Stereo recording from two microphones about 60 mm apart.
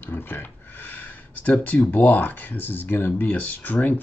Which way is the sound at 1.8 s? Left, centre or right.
Left.